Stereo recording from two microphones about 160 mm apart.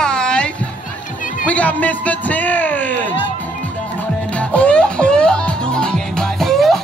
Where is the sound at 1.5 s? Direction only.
10° left (ahead or behind).